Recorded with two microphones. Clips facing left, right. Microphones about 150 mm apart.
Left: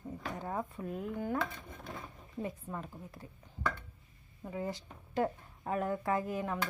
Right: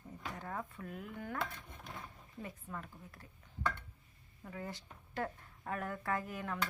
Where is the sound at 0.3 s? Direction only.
20° left (ahead or behind).